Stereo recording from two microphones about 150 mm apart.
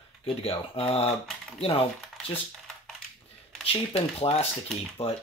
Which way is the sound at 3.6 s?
40° left (ahead or behind).